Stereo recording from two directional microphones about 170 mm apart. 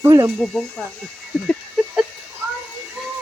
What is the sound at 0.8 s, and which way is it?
Speech, 5° left (ahead or behind).